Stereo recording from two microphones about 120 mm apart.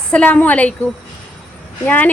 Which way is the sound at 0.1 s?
10° left (ahead or behind).